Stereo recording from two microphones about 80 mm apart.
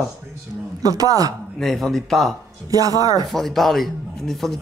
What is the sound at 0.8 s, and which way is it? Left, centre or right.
Speech, right.